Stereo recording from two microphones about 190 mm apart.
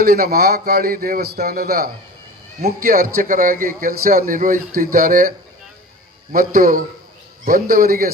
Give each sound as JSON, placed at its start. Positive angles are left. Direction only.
{"t": 0.0, "sound": "a man's voice", "side_deg": -55}
{"t": 6.3, "sound": "a man's voice", "side_deg": -50}